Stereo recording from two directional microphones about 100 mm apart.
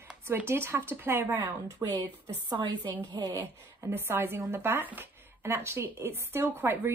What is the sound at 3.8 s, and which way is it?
A woman's voice, 25° right (ahead or behind).